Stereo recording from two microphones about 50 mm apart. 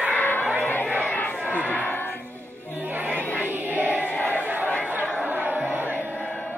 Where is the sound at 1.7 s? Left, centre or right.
Left.